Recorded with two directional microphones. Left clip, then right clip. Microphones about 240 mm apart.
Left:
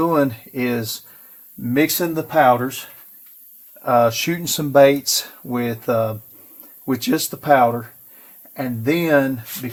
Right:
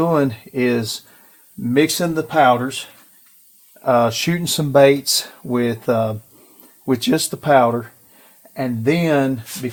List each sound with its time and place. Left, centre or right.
0.0 s speech: right
3.8 s speech: right